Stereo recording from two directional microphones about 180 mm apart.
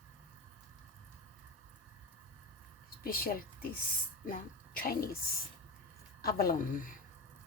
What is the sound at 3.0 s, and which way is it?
A woman's voice, 55° left (ahead or behind).